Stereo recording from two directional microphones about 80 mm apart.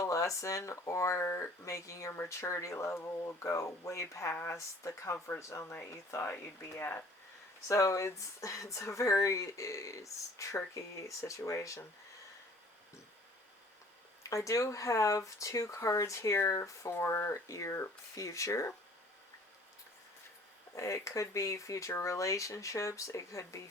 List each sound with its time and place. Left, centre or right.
0.0 s speech: left
6.2 s speech: left
7.7 s speech: left
14.3 s speech: left
16.1 s speech: left
16.5 s speech: left
20.7 s speech: left